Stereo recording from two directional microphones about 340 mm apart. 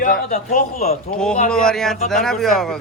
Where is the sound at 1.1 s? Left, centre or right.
Centre.